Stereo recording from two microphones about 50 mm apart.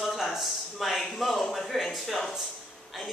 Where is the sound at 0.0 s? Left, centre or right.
Centre.